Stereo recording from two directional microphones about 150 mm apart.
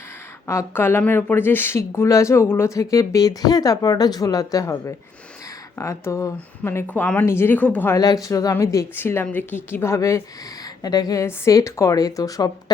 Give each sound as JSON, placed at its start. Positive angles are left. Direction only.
{"t": 0.4, "sound": "speech", "side_deg": 15}
{"t": 7.9, "sound": "speech", "side_deg": 25}